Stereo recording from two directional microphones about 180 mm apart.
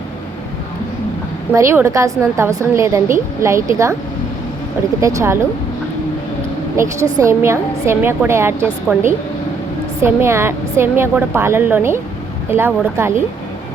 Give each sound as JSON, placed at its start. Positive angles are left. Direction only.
{"t": 1.5, "sound": "a woman's voice", "side_deg": -15}
{"t": 4.9, "sound": "a woman's voice", "side_deg": -15}
{"t": 6.8, "sound": "a woman's voice", "side_deg": -15}
{"t": 10.2, "sound": "a woman's voice", "side_deg": -15}